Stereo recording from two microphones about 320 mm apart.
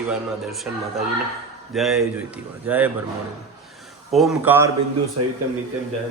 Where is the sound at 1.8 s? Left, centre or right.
Centre.